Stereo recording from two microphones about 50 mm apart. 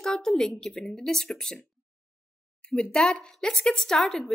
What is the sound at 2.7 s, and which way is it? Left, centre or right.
Speech, centre.